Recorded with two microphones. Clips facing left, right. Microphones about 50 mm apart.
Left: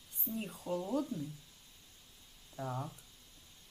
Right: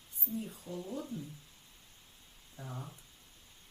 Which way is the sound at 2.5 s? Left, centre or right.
Left.